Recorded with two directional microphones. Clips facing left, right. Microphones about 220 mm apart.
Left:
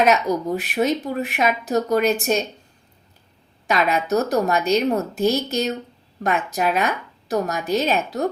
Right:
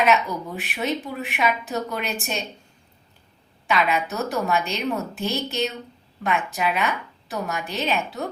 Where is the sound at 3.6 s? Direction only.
40° left (ahead or behind).